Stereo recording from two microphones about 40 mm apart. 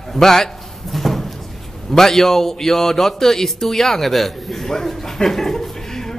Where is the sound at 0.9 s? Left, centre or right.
Centre.